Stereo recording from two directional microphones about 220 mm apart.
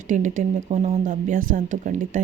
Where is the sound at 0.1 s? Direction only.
35° right (ahead or behind).